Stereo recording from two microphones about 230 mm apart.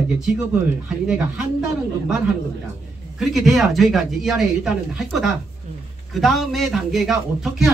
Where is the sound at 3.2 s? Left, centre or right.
Centre.